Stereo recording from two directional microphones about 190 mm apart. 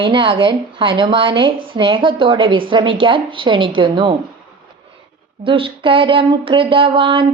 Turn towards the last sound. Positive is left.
turn(degrees=-25)  # may be behind; listen again after turning